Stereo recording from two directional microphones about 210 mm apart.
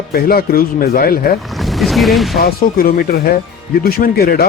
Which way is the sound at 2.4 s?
45° left (ahead or behind).